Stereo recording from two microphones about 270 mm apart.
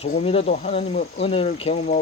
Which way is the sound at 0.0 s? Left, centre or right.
Left.